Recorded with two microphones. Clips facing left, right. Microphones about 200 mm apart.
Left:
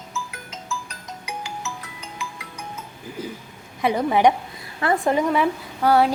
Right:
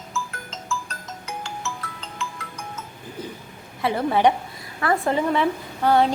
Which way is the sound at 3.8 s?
15° left (ahead or behind).